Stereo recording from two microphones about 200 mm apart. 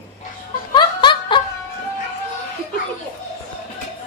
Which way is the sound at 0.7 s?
20° left (ahead or behind).